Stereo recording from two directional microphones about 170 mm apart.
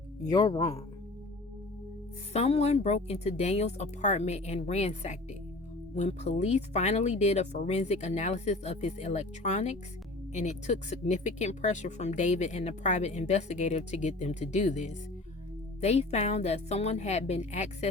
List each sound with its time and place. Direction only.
0.2 s speech: 20° left (ahead or behind)
2.3 s speech: 40° left (ahead or behind)